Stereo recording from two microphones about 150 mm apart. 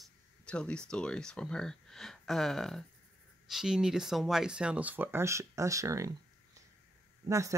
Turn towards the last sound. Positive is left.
turn(degrees=-20)  # may be behind; listen again after turning